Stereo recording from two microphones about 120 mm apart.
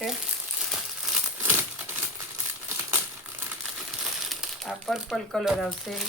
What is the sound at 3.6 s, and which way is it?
Crumpling, centre (ahead or behind).